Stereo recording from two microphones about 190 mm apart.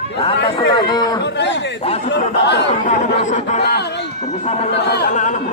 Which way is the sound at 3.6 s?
60° left (ahead or behind).